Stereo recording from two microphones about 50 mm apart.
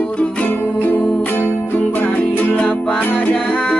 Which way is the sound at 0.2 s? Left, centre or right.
Left.